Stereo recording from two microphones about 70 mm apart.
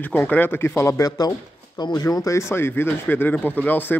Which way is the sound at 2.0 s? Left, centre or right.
Left.